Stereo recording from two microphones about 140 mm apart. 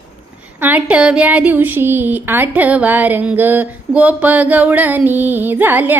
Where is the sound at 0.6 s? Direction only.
10° right (ahead or behind).